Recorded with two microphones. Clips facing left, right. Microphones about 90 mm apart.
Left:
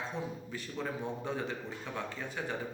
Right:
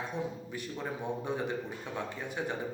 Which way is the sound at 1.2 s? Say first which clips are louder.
Right 3 dB; 20° right (ahead or behind).